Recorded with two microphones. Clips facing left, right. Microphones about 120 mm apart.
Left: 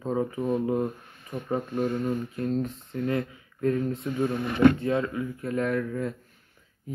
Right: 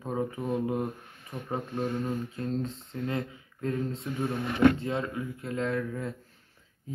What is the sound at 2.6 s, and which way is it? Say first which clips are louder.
Speech: left 4 dB; 25° right (ahead or behind).